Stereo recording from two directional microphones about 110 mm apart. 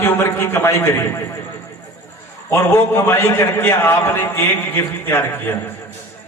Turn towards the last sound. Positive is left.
turn(degrees=20)  # may be behind; listen again after turning